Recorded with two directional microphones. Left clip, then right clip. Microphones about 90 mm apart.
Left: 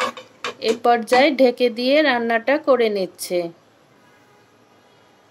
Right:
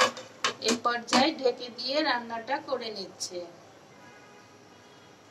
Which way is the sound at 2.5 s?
25° left (ahead or behind).